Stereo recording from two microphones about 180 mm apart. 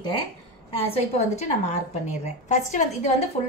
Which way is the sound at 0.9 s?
35° left (ahead or behind).